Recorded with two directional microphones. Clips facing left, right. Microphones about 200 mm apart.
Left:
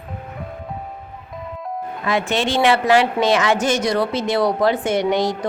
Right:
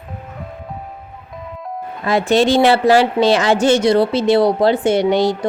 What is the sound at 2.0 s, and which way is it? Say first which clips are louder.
A woman's voice: right 7 dB; 35° right (ahead or behind).